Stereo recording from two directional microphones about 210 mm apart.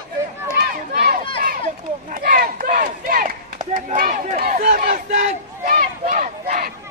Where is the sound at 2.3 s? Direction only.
40° right (ahead or behind).